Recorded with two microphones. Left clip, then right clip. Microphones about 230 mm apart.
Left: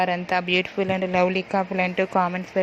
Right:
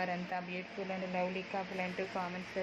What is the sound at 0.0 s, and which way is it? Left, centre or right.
Speech, left.